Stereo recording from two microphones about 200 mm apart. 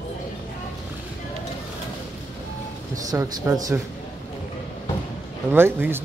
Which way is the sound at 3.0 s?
20° right (ahead or behind).